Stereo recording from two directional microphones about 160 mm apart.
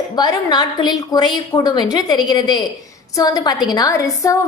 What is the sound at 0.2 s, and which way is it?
A woman's voice, 25° left (ahead or behind).